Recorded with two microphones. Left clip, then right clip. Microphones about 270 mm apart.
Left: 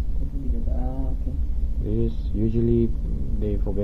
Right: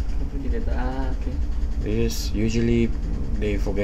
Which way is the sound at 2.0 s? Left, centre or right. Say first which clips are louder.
Right 2 dB; centre.